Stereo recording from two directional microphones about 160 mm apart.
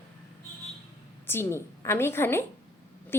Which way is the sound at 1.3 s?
15° left (ahead or behind).